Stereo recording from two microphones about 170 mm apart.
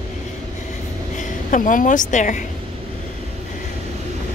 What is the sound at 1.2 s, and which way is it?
A woman's voice, 50° left (ahead or behind).